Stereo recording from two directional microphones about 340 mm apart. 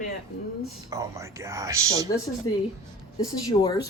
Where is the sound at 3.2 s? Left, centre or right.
Centre.